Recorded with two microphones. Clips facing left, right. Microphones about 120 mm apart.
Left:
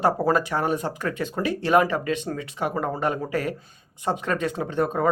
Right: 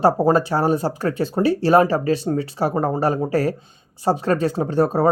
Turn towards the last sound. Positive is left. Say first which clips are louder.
# right 6 dB
turn(degrees=-35)  # may be behind; listen again after turning